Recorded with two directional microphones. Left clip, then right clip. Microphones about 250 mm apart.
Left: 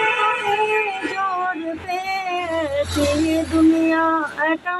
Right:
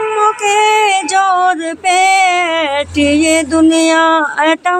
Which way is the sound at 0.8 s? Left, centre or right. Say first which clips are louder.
Right 12 dB; right.